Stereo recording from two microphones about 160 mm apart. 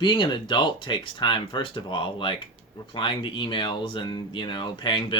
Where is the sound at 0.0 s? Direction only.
30° left (ahead or behind).